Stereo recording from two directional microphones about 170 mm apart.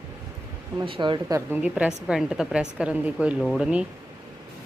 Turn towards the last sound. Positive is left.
turn(degrees=-5)  # may be behind; listen again after turning